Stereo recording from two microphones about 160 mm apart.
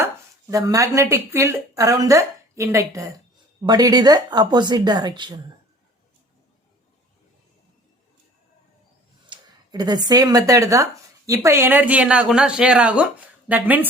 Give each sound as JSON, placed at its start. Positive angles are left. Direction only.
{"t": 0.5, "sound": "speech", "side_deg": -20}
{"t": 9.3, "sound": "speech", "side_deg": -25}